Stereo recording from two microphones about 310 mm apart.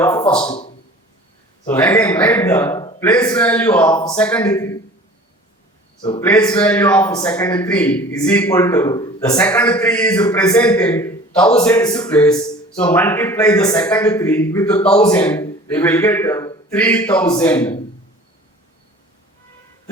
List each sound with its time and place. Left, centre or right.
0.0 s a man's voice: centre
1.6 s a man's voice: centre
6.0 s a man's voice: centre
6.2 s a man's voice: centre